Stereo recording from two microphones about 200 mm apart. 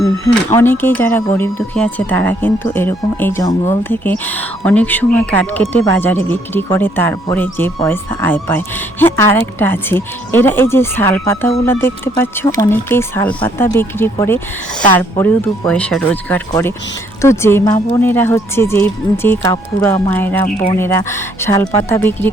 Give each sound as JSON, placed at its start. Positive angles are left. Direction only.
{"t": 0.5, "sound": "speech", "side_deg": 10}